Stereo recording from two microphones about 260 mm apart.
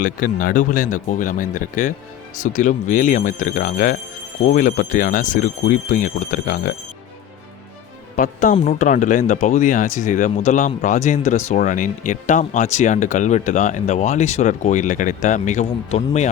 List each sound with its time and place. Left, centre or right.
0.0 s speech: left
8.1 s speech: left